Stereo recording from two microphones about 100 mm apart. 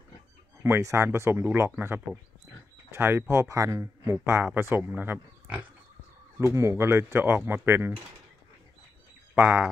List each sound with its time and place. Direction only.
0.6 s speech: 25° right (ahead or behind)
6.4 s speech: 30° right (ahead or behind)
9.3 s speech: 15° right (ahead or behind)